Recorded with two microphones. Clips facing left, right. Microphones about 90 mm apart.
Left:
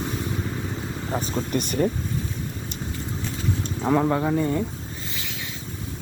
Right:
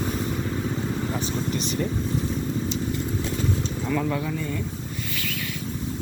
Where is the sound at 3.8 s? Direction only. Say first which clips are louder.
Left 7 dB; 35° left (ahead or behind).